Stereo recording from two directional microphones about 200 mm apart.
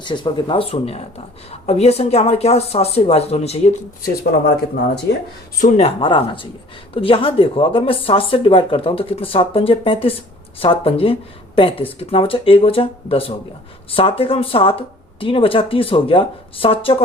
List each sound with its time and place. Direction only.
0.0 s a woman's voice: 25° left (ahead or behind)
4.0 s speech: 50° left (ahead or behind)
5.5 s speech: 35° left (ahead or behind)